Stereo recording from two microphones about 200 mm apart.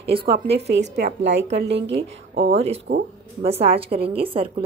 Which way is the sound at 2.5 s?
30° right (ahead or behind).